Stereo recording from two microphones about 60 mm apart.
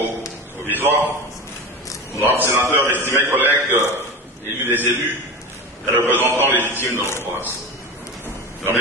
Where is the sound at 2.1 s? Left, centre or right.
Right.